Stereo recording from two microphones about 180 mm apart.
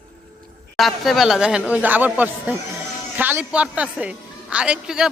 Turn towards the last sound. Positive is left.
turn(degrees=-5)  # may be behind; listen again after turning